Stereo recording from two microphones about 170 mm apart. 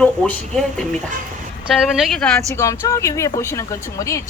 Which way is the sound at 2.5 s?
20° left (ahead or behind).